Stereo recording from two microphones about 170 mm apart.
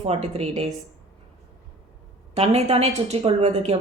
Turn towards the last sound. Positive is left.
turn(degrees=-40)  # may be behind; listen again after turning